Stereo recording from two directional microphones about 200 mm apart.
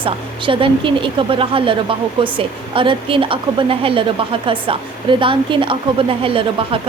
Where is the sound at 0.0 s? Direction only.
25° right (ahead or behind).